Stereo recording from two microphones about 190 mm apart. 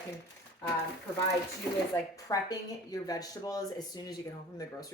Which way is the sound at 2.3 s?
20° left (ahead or behind).